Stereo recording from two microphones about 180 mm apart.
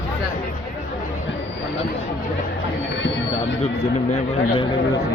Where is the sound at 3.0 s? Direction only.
90° left.